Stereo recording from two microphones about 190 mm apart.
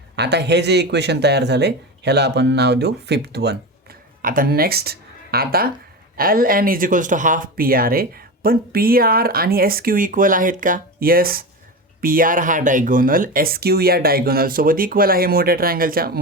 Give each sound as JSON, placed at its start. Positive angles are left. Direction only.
{"t": 0.2, "sound": "speech", "side_deg": -60}
{"t": 4.2, "sound": "speech", "side_deg": -45}